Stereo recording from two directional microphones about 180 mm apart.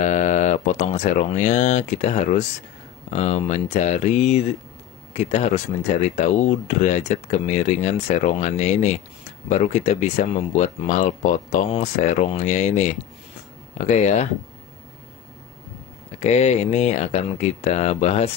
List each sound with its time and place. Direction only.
0.0 s speech: 40° left (ahead or behind)
16.2 s speech: 35° left (ahead or behind)